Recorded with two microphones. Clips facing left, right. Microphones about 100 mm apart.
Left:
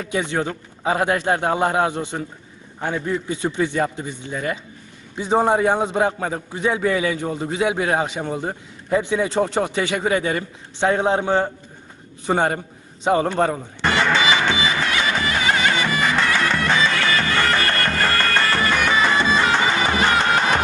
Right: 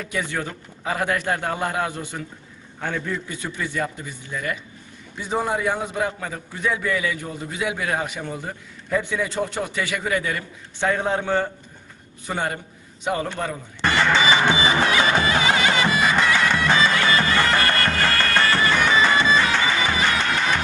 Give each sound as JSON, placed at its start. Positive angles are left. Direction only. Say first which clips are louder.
{"t": 0.0, "sound": "a man's voice", "louder": "left 4 dB", "side_deg": 25}
{"t": 14.0, "sound": "music", "louder": "even", "side_deg": 5}
{"t": 14.3, "sound": "music", "louder": "right 1 dB", "side_deg": -20}
{"t": 15.4, "sound": "music", "louder": "even", "side_deg": -15}
{"t": 16.1, "sound": "bagpipes", "louder": "even", "side_deg": -5}
{"t": 16.6, "sound": "music", "louder": "even", "side_deg": -5}
{"t": 16.9, "sound": "bagpipes", "louder": "right 1 dB", "side_deg": -15}
{"t": 17.8, "sound": "music", "louder": "left 1 dB", "side_deg": 0}
{"t": 19.6, "sound": "music", "louder": "left 3 dB", "side_deg": 35}